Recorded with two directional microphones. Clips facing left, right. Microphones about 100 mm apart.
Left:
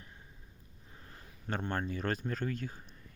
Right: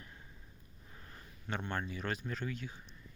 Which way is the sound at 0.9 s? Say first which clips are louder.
Left 1 dB; 25° left (ahead or behind).